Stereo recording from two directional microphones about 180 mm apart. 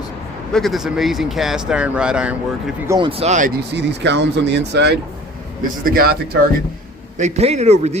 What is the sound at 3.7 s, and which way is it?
Speech, 70° right (ahead or behind).